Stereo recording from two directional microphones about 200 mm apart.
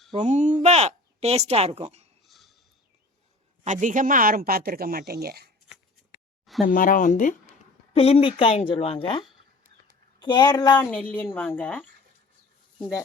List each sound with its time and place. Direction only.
0.1 s speech: 35° right (ahead or behind)
2.2 s a sound: centre (ahead or behind)
3.6 s speech: 35° right (ahead or behind)
6.4 s a sound: centre (ahead or behind)
6.7 s speech: 45° left (ahead or behind)
7.9 s a woman's voice: 30° left (ahead or behind)
10.8 s a woman's voice: 5° left (ahead or behind)